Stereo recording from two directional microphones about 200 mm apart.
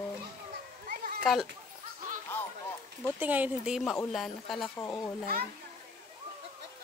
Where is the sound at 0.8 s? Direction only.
45° right (ahead or behind).